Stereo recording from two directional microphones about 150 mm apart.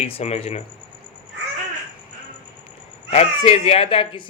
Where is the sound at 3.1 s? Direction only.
45° left (ahead or behind).